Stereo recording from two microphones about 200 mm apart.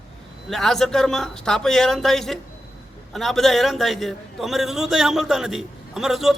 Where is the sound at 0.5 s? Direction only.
Centre (ahead or behind).